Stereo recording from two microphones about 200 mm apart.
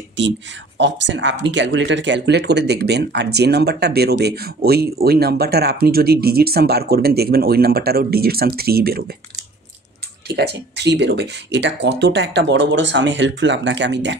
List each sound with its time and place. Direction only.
0.2 s speech: 65° right (ahead or behind)
10.2 s speech: 55° right (ahead or behind)